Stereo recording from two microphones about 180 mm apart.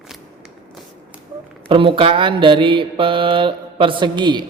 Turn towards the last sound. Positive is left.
turn(degrees=-25)  # may be behind; listen again after turning